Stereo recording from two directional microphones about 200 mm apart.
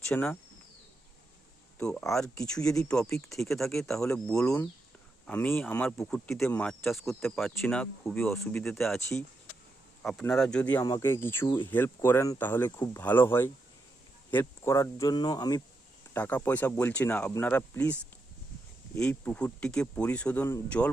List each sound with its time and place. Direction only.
0.1 s speech: 10° left (ahead or behind)
1.8 s speech: 5° left (ahead or behind)
10.0 s speech: 5° left (ahead or behind); by 15.6 s 20° left (ahead or behind)
16.1 s speech: 10° left (ahead or behind)
18.9 s speech: 5° left (ahead or behind)